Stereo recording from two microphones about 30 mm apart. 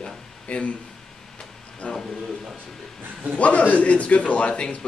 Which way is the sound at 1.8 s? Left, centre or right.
Left.